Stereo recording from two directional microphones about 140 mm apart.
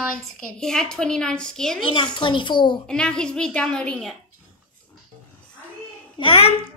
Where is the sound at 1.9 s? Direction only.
35° left (ahead or behind).